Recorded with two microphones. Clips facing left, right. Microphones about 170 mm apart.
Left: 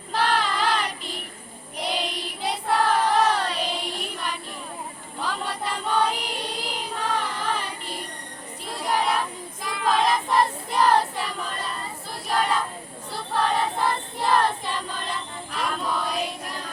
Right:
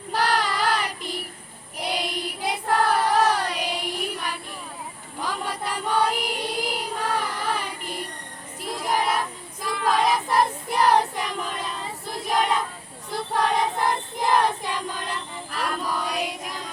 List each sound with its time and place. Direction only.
0.1 s child singing: 10° right (ahead or behind)
5.2 s choir: 10° right (ahead or behind)
9.7 s child singing: 5° right (ahead or behind)
12.3 s a sound: 15° right (ahead or behind)
13.3 s choir: 15° right (ahead or behind)